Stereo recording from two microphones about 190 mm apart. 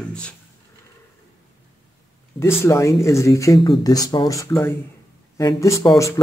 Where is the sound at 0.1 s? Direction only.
5° left (ahead or behind).